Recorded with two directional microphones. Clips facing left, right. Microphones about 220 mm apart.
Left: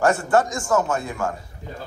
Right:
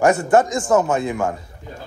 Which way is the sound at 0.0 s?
20° right (ahead or behind).